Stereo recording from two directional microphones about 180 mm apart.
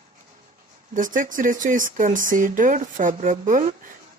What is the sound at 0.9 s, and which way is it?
Speech, 45° right (ahead or behind).